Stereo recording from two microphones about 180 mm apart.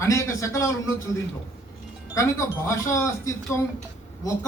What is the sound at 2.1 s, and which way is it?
A man's voice, 15° left (ahead or behind).